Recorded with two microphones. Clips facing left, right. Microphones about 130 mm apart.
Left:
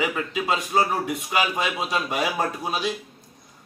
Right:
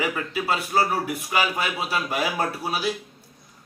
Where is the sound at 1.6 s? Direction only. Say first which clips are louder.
Left 1 dB; 5° right (ahead or behind).